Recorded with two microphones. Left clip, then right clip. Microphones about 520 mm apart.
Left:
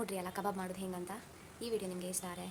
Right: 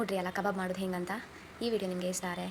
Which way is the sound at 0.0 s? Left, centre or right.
Left.